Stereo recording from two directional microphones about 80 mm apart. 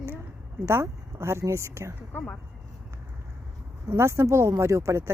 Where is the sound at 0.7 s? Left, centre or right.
Right.